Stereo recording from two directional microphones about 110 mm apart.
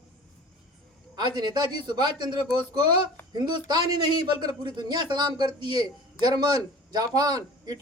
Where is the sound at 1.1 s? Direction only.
40° right (ahead or behind).